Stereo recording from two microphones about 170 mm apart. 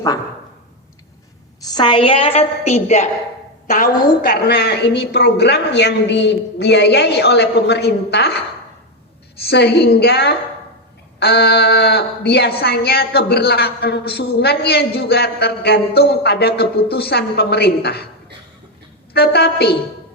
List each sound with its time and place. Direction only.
1.6 s a woman's voice: 25° left (ahead or behind)
4.2 s a man's voice: 70° left (ahead or behind)
9.5 s a woman's voice: 75° left (ahead or behind)
19.1 s a woman's voice: 70° left (ahead or behind)